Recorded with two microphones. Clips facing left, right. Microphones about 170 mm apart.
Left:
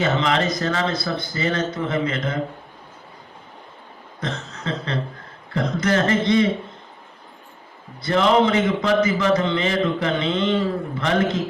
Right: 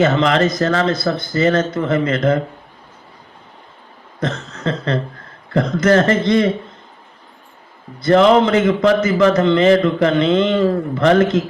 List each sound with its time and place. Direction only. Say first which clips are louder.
0.0 s speech: right 6 dB; 55° right (ahead or behind)
4.2 s a sound: right 7 dB; 55° right (ahead or behind)
5.5 s speech: right 7 dB; 55° right (ahead or behind)
8.0 s a man's voice: right 6 dB; 55° right (ahead or behind)